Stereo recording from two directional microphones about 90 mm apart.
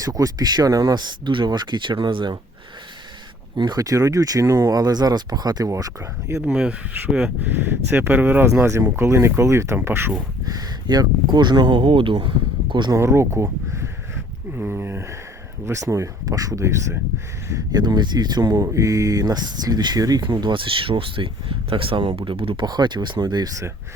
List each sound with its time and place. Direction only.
0.0 s speech: 40° right (ahead or behind); by 2.4 s 60° right (ahead or behind)
3.6 s speech: 50° right (ahead or behind)
5.7 s speech: 35° right (ahead or behind)
6.4 s speech: 10° right (ahead or behind)
7.5 s speech: 25° right (ahead or behind)
10.4 s speech: 45° right (ahead or behind); by 12.9 s 65° right (ahead or behind)
13.0 s speech: 30° right (ahead or behind)
17.7 s speech: 50° right (ahead or behind)
20.5 s speech: 75° right (ahead or behind)
22.6 s speech: 55° right (ahead or behind)